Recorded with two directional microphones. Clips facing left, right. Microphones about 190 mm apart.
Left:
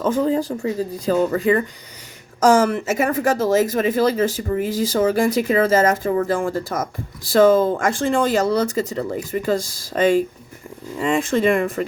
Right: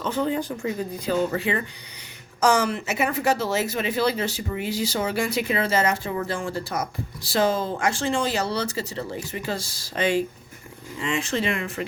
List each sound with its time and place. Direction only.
0.0 s speech: 40° left (ahead or behind)